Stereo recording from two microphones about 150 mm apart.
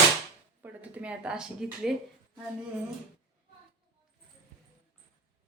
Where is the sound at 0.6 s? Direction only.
10° right (ahead or behind).